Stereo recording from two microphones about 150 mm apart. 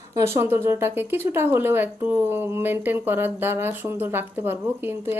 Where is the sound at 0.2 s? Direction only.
20° right (ahead or behind).